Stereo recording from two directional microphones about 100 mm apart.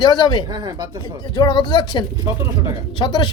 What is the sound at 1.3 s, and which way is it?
Speech, 45° left (ahead or behind).